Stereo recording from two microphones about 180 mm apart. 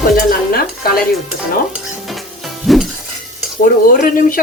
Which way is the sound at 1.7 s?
Centre (ahead or behind).